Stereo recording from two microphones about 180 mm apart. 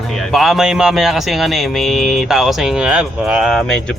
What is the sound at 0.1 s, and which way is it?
A man's voice, centre (ahead or behind).